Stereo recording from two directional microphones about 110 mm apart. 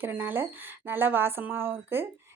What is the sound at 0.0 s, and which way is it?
Speech, 15° right (ahead or behind).